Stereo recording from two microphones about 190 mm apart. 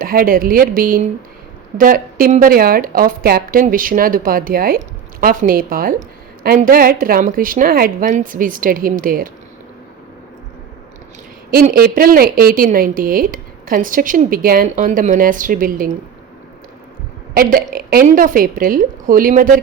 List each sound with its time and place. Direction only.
0.0 s a woman's voice: 50° right (ahead or behind)
11.5 s a woman's voice: 50° right (ahead or behind)
17.3 s a woman's voice: 50° right (ahead or behind)